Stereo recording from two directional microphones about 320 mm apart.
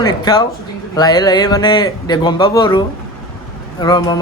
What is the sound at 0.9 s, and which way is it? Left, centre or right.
A man's voice, centre.